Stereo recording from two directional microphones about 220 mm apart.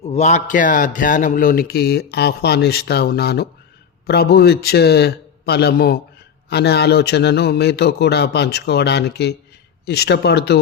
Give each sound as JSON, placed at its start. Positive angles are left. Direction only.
{"t": 0.0, "sound": "a man's voice", "side_deg": 30}